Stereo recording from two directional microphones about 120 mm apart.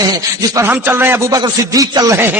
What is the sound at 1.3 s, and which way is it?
Speech, 35° right (ahead or behind).